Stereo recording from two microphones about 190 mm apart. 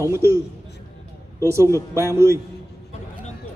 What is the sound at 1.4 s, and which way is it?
Speech, 15° right (ahead or behind).